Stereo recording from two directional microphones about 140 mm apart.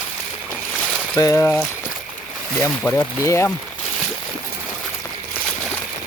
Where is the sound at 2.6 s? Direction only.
15° left (ahead or behind).